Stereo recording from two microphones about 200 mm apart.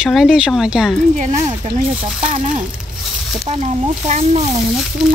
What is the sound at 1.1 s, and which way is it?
Speech, 35° right (ahead or behind).